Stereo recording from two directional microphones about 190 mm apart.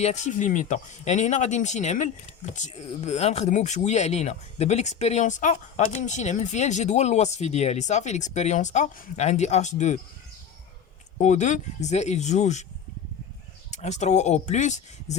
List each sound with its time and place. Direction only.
0.0 s speech: 40° left (ahead or behind)
11.2 s speech: 40° left (ahead or behind)
13.7 s speech: 35° left (ahead or behind)